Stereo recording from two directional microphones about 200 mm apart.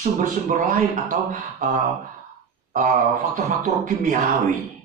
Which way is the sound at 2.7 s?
40° right (ahead or behind).